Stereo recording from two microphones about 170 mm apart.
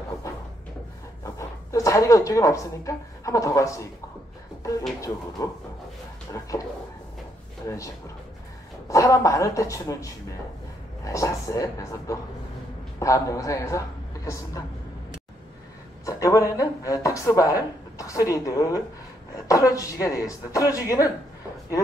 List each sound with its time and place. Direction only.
1.2 s speech: 20° left (ahead or behind)
5.4 s speech: 20° left (ahead or behind)
7.6 s a woman's voice: 20° left (ahead or behind)
16.1 s speech: 20° left (ahead or behind)